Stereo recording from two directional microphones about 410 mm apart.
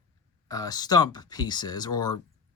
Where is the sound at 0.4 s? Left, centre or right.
Centre.